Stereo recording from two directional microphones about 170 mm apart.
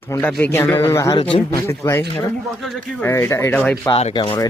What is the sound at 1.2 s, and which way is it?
Speech, 35° left (ahead or behind).